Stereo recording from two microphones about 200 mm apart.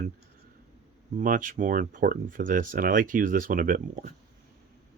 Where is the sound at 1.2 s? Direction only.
45° right (ahead or behind).